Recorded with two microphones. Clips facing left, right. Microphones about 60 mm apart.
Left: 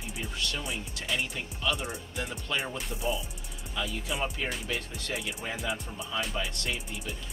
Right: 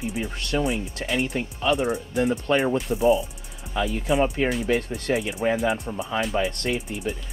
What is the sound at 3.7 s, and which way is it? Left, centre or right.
Speech, right.